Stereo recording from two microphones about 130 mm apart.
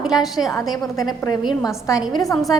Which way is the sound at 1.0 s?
30° left (ahead or behind).